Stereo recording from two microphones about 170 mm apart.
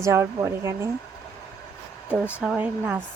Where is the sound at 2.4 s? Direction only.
5° right (ahead or behind).